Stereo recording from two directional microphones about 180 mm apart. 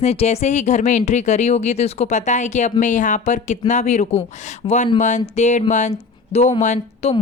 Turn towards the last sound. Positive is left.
turn(degrees=40)  # may be behind; listen again after turning